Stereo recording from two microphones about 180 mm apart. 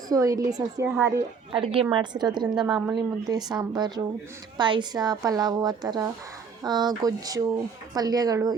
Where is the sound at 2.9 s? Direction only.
20° right (ahead or behind).